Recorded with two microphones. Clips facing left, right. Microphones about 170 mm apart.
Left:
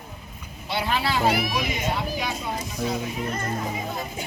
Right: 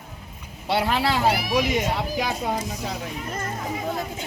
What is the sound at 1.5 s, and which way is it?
Speech, 85° right.